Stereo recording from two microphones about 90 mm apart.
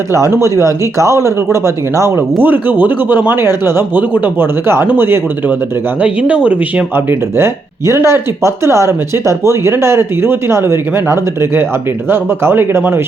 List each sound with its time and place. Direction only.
0.1 s speech: 30° right (ahead or behind)